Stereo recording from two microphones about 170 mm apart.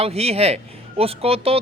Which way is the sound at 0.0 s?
35° right (ahead or behind).